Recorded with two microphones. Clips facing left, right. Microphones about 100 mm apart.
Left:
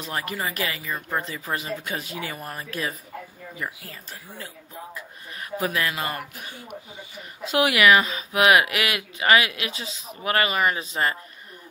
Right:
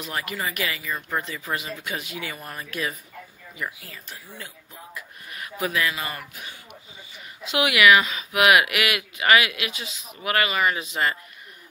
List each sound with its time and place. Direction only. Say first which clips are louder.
0.0 s speech: left 1 dB; 35° left (ahead or behind)